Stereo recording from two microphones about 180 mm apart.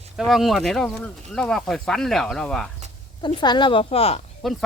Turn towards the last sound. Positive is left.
turn(degrees=0)  # may be behind; listen again after turning